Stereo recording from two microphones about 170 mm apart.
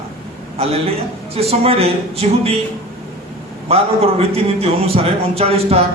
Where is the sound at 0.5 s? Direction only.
35° right (ahead or behind).